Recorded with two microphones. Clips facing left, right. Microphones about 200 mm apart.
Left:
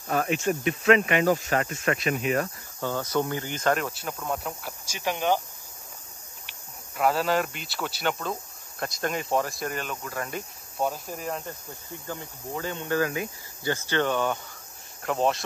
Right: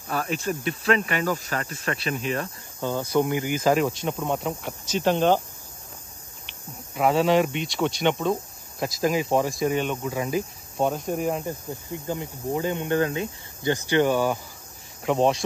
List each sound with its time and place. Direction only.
0.7 s speech: 35° right (ahead or behind)
2.8 s speech: 15° right (ahead or behind); by 5.3 s 10° left (ahead or behind)
7.0 s speech: centre (ahead or behind)
11.9 s speech: 20° right (ahead or behind); by 15.4 s centre (ahead or behind)